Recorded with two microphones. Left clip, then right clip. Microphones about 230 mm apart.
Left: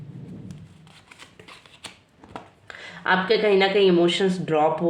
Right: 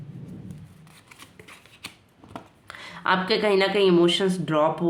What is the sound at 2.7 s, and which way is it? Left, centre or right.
Speech, right.